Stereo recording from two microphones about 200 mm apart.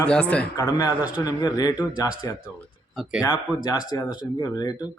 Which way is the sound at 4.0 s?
15° left (ahead or behind).